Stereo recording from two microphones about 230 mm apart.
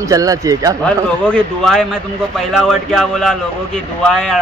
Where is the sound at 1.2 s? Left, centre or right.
Centre.